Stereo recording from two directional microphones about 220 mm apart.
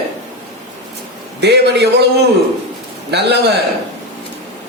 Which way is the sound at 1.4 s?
50° right (ahead or behind).